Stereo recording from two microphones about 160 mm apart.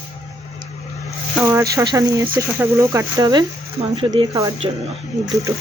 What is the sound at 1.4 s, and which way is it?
Speech, 15° right (ahead or behind).